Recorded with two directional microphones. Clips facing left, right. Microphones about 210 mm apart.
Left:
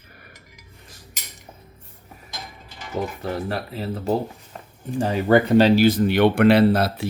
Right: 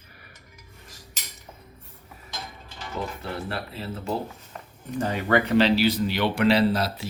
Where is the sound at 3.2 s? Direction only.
40° left (ahead or behind).